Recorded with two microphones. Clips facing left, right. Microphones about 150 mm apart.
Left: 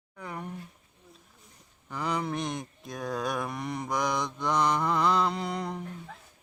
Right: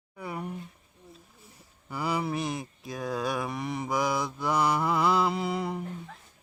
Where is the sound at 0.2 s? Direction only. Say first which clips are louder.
Right 3 dB; 10° right (ahead or behind).